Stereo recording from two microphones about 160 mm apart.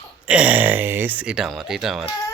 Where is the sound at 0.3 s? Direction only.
10° right (ahead or behind).